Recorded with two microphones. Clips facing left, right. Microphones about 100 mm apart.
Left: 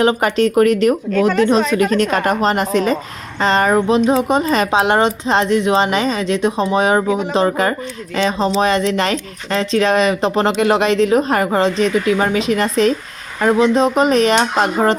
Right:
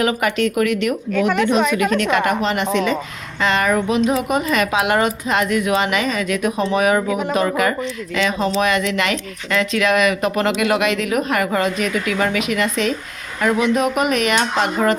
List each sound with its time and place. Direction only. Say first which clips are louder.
0.0 s speech: left 4 dB; 30° left (ahead or behind)